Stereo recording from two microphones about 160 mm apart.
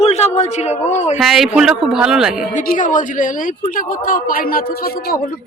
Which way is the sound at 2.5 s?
55° left (ahead or behind).